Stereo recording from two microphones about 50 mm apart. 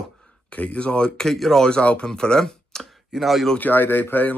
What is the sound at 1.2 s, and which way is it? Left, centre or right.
Speech, centre.